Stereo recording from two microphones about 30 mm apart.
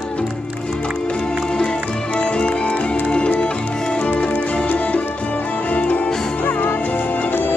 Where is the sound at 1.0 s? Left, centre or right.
Left.